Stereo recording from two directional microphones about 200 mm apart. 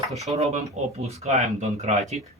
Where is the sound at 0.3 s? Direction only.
35° right (ahead or behind).